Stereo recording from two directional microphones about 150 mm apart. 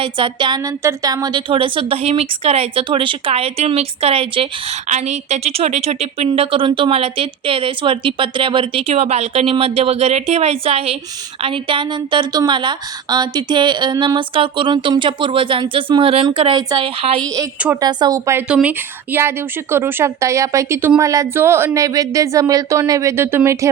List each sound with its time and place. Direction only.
0.0 s a woman's voice: 35° right (ahead or behind)
4.9 s a woman's voice: 50° right (ahead or behind); by 18.4 s 20° right (ahead or behind)
18.4 s speech: 10° right (ahead or behind)